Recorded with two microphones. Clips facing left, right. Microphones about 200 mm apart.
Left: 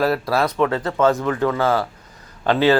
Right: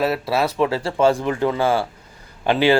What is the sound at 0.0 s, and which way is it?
Speech, 5° right (ahead or behind).